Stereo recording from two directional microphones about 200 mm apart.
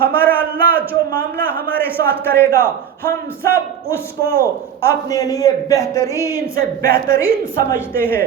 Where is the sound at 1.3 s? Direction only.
10° left (ahead or behind).